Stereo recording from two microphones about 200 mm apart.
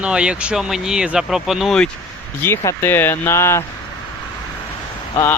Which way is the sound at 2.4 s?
15° left (ahead or behind).